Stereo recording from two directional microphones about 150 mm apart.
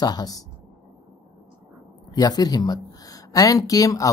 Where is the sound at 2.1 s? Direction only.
25° left (ahead or behind).